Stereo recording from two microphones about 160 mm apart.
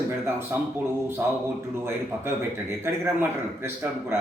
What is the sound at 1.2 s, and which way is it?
A man's voice, 10° right (ahead or behind).